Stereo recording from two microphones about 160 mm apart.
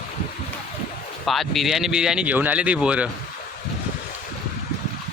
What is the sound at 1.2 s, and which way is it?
Speech, centre (ahead or behind).